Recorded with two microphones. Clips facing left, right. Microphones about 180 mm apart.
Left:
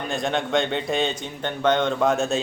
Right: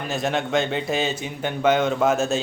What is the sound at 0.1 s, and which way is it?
A man's voice, centre (ahead or behind).